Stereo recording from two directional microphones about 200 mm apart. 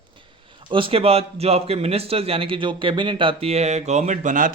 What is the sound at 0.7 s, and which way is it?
A man's voice, 25° right (ahead or behind).